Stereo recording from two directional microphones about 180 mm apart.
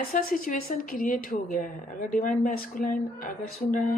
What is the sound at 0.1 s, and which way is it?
Speech, 50° left (ahead or behind).